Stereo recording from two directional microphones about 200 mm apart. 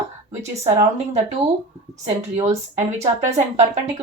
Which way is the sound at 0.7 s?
35° right (ahead or behind).